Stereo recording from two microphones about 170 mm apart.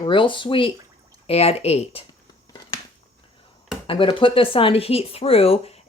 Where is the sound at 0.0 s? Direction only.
30° left (ahead or behind).